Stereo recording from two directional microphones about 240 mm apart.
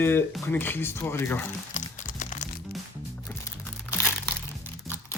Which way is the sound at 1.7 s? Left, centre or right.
Left.